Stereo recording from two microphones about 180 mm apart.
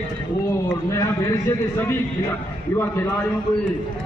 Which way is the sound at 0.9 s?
15° left (ahead or behind).